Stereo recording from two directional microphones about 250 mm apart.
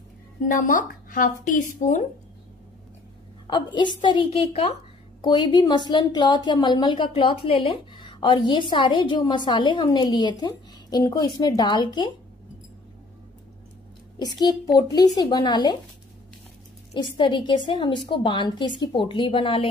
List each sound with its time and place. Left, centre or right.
0.5 s speech: left
3.4 s a woman's voice: centre
14.8 s a woman's voice: centre
16.9 s a woman's voice: centre